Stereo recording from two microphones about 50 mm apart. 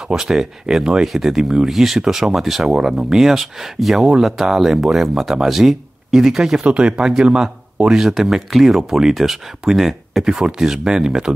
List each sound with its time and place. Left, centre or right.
0.1 s speech: centre
6.6 s speech: right